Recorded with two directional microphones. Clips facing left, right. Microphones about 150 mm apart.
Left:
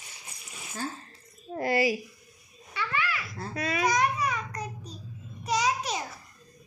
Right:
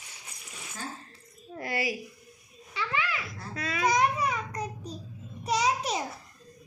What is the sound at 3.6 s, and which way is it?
Babbling, 20° left (ahead or behind).